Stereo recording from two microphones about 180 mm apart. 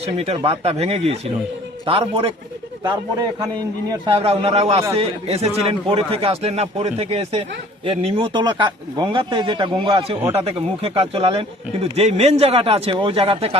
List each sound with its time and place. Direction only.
0.0 s speech: 35° right (ahead or behind)
2.8 s speech: 20° right (ahead or behind)
4.0 s speech: 30° right (ahead or behind)